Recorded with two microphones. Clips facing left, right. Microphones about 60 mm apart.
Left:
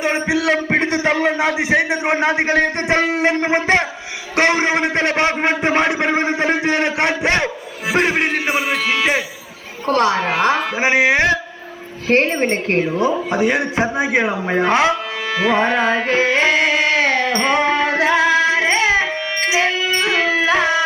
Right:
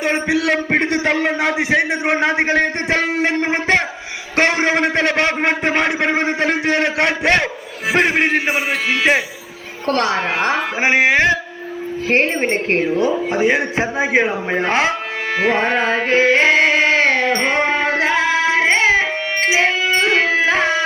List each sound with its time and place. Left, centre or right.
0.1 s a man's voice: right
5.3 s a man's voice: right
6.1 s a man's voice: right
6.4 s a man's voice: right
10.1 s a man's voice: right
12.4 s a man's voice: centre
12.6 s a man's voice: right
12.9 s speech: left
13.3 s a man's voice: right
14.5 s music: right
17.4 s carnatic music: right